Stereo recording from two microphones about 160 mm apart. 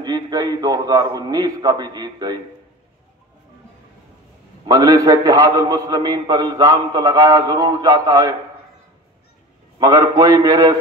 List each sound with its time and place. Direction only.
0.0 s a man's voice: 25° right (ahead or behind)
4.6 s a man's voice: 20° right (ahead or behind)
9.8 s a man's voice: 25° right (ahead or behind)